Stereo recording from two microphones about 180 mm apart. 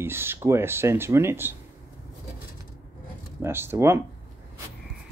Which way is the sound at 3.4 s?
15° right (ahead or behind).